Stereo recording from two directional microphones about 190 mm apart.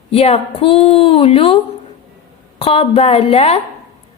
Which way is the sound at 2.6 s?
30° left (ahead or behind).